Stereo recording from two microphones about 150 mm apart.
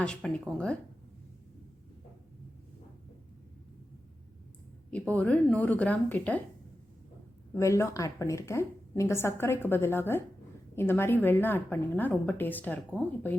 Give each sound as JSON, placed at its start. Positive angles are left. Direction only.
{"t": 0.0, "sound": "speech", "side_deg": 5}
{"t": 4.9, "sound": "a woman's voice", "side_deg": 10}
{"t": 7.5, "sound": "a woman's voice", "side_deg": 20}